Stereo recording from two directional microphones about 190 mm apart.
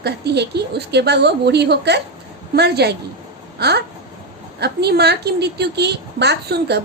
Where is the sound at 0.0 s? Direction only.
60° right (ahead or behind).